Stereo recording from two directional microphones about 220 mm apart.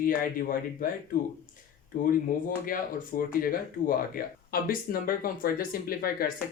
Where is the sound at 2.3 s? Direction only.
40° left (ahead or behind).